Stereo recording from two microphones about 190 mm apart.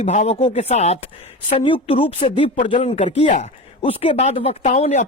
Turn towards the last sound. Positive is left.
turn(degrees=35)  # may be behind; listen again after turning